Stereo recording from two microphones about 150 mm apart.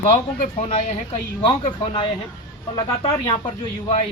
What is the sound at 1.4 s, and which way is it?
Speech, 35° left (ahead or behind).